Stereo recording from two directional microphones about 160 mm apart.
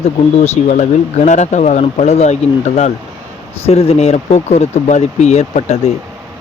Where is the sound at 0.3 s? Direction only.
45° left (ahead or behind).